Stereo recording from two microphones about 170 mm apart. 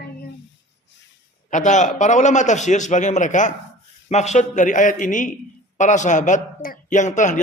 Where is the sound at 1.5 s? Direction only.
45° left (ahead or behind).